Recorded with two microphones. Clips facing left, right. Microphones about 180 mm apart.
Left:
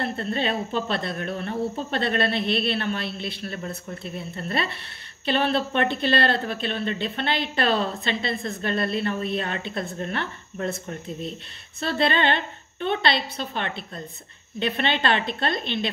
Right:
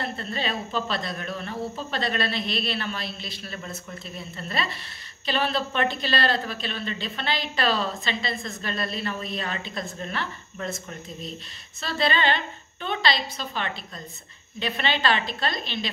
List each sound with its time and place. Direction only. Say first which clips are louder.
0.0 s speech: left 4 dB; 55° left (ahead or behind)
11.8 s speech: left 2 dB; 60° left (ahead or behind)